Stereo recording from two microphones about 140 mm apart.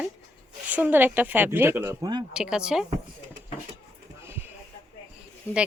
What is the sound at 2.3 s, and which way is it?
Speech, 5° right (ahead or behind).